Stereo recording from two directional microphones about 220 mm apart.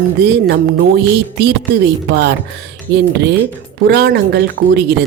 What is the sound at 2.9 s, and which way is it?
Speech, 15° right (ahead or behind).